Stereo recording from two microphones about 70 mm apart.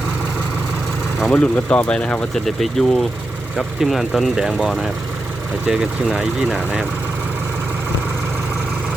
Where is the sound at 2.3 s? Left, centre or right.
Centre.